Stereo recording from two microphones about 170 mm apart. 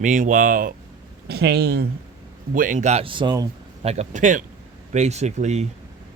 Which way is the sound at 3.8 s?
40° right (ahead or behind).